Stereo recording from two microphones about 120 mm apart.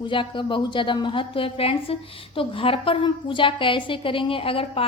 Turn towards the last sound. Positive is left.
turn(degrees=50)  # may be behind; listen again after turning